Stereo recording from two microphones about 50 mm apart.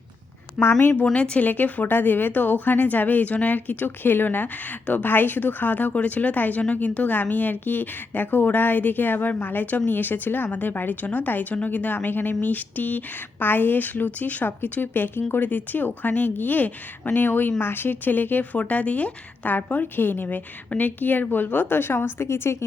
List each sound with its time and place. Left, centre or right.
0.6 s a woman's voice: centre
1.1 s speech: left
1.5 s speech: left